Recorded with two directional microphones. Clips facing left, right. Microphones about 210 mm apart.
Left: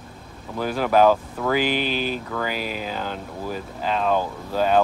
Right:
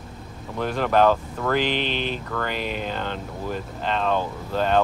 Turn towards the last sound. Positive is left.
turn(degrees=5)  # may be behind; listen again after turning